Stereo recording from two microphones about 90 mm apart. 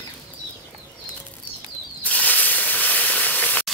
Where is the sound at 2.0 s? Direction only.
15° left (ahead or behind).